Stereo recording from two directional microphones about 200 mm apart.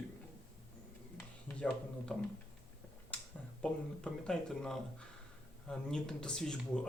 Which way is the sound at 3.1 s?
5° left (ahead or behind).